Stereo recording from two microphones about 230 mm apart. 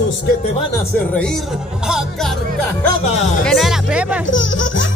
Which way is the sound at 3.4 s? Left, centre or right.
Centre.